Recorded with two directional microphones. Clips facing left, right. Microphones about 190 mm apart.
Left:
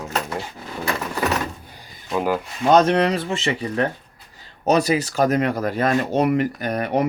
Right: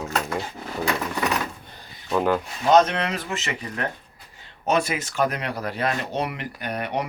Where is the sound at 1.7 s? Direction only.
10° left (ahead or behind).